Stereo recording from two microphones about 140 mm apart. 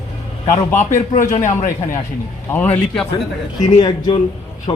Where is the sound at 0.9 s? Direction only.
65° left (ahead or behind).